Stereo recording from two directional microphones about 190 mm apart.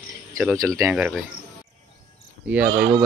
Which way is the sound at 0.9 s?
5° right (ahead or behind).